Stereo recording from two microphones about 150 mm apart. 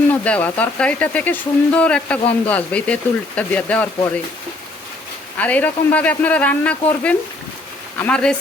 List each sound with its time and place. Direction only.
0.1 s speech: 10° left (ahead or behind)
5.4 s speech: 10° left (ahead or behind)